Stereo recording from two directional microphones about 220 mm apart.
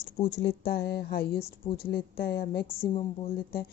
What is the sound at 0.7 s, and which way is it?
A woman's voice, 45° left (ahead or behind).